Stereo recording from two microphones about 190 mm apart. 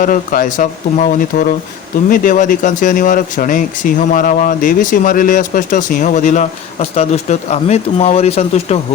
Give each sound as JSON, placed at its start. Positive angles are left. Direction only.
{"t": 0.0, "sound": "speech", "side_deg": 45}